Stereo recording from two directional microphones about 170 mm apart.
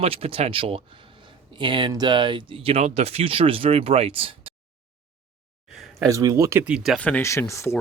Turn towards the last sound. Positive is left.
turn(degrees=15)  # may be behind; listen again after turning